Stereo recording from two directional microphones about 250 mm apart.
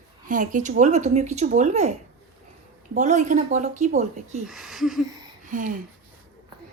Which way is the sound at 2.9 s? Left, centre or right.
Right.